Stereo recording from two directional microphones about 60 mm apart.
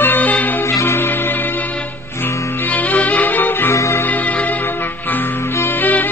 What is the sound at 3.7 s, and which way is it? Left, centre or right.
Music, left.